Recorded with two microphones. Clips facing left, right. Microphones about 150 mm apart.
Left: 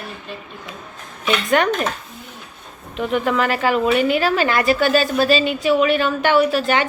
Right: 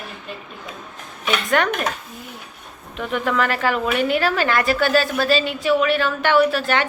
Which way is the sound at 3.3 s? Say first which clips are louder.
Left 2 dB; 10° left (ahead or behind).